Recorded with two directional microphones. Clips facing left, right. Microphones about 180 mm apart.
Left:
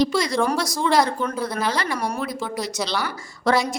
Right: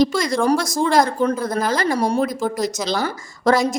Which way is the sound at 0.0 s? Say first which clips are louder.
Right 3 dB; 45° right (ahead or behind).